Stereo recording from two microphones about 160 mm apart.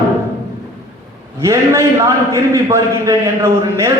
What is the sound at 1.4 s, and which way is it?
A man's voice, 20° right (ahead or behind).